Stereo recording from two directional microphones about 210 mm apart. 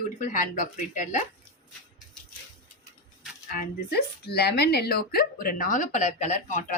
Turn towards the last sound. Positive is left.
turn(degrees=35)  # may be behind; listen again after turning